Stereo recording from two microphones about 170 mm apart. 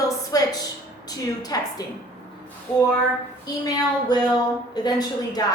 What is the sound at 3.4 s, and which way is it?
A woman's voice, 20° left (ahead or behind).